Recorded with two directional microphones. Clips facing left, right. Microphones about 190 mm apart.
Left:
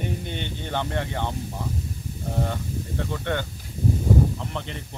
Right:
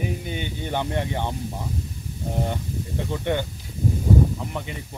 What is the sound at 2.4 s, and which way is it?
Speech, 15° right (ahead or behind).